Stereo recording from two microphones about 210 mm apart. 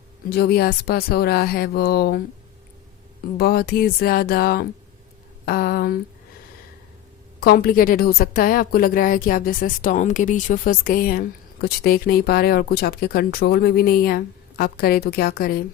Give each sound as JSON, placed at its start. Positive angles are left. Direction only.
{"t": 0.3, "sound": "a woman's voice", "side_deg": 50}
{"t": 3.3, "sound": "a woman's voice", "side_deg": 45}
{"t": 7.3, "sound": "a woman's voice", "side_deg": 45}